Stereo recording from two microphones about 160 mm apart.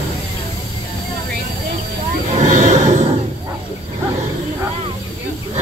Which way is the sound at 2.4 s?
50° right (ahead or behind).